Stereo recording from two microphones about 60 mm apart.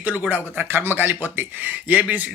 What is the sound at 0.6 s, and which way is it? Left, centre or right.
Speech, right.